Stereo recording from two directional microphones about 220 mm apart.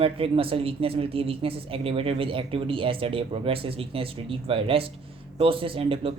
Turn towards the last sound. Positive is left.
turn(degrees=-25)  # may be behind; listen again after turning